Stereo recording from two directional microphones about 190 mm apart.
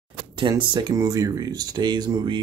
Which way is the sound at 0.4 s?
20° right (ahead or behind).